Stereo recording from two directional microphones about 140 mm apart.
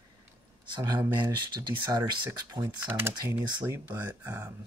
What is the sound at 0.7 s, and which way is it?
Speech, 35° right (ahead or behind).